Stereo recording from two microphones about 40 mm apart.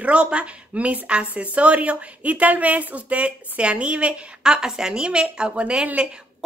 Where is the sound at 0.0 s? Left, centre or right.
Right.